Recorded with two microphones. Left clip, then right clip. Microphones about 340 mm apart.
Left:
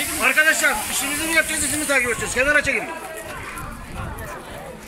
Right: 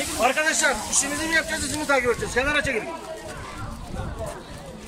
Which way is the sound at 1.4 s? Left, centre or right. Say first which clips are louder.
Left 7 dB; right.